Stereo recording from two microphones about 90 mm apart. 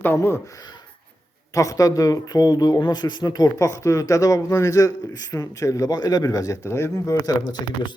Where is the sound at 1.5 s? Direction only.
40° left (ahead or behind).